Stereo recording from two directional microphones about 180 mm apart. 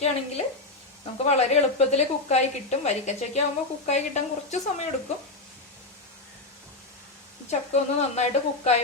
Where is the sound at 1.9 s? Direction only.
35° left (ahead or behind).